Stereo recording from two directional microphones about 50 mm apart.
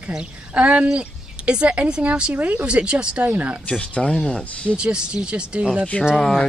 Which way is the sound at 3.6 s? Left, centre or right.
Left.